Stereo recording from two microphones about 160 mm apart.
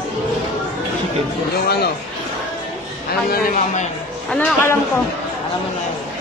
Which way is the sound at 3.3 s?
60° left (ahead or behind).